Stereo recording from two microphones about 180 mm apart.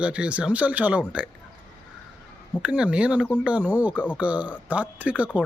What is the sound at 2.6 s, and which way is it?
Speech, 5° right (ahead or behind).